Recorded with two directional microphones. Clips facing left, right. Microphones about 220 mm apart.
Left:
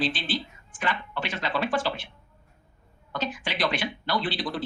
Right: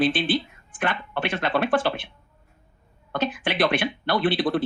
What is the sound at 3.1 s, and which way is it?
Speech, 55° right (ahead or behind).